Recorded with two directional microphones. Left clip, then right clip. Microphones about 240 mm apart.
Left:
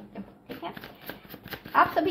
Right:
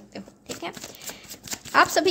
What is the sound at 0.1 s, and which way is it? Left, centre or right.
Sewing machine, right.